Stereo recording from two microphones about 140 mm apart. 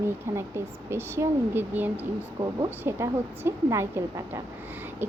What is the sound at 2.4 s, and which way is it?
Speech, 50° right (ahead or behind).